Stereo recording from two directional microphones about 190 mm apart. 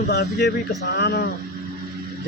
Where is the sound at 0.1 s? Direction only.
60° left (ahead or behind).